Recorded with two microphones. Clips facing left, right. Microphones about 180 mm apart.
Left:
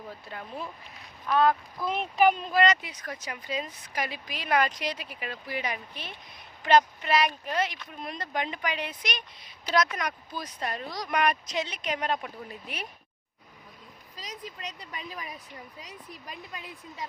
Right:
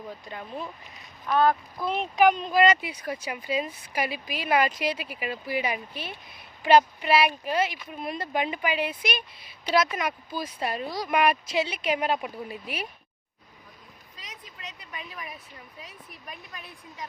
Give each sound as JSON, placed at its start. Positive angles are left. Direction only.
{"t": 0.3, "sound": "speech", "side_deg": 0}
{"t": 14.2, "sound": "speech", "side_deg": 35}